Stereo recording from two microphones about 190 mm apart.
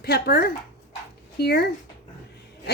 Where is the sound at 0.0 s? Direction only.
55° left (ahead or behind).